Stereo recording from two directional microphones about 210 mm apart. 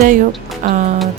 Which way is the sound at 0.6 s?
40° right (ahead or behind).